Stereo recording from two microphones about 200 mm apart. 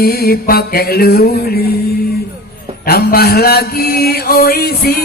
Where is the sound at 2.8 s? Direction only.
50° left (ahead or behind).